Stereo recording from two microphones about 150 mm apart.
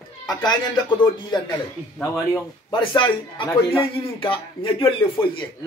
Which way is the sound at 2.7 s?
35° left (ahead or behind).